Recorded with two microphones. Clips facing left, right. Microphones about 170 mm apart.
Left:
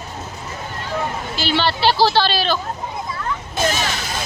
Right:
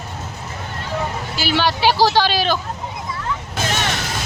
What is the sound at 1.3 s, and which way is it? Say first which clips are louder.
Speech: right 1 dB; 10° right (ahead or behind).